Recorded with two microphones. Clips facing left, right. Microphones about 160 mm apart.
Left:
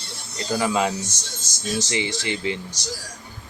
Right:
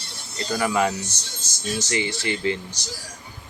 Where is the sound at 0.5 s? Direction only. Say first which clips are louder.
Even; 20° left (ahead or behind).